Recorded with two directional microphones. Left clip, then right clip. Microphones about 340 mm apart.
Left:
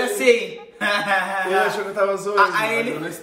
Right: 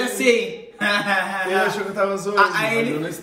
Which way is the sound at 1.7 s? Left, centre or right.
Centre.